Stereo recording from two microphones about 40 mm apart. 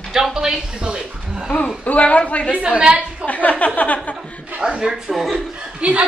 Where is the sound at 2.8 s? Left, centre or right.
Right.